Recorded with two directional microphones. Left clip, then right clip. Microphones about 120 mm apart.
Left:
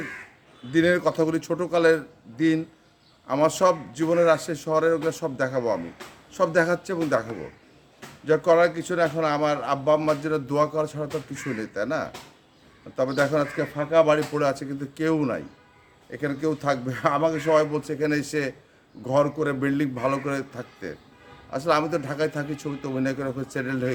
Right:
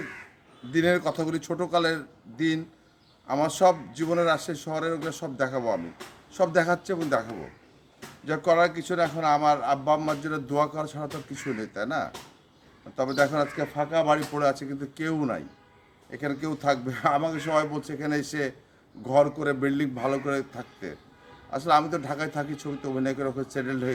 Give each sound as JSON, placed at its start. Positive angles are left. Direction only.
{"t": 0.7, "sound": "a man's voice", "side_deg": 20}
{"t": 8.3, "sound": "a man's voice", "side_deg": 25}